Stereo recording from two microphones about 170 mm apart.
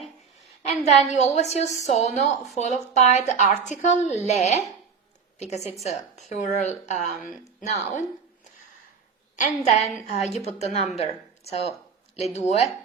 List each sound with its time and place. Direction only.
1.1 s a woman's voice: 40° left (ahead or behind)
9.3 s a woman's voice: 45° left (ahead or behind)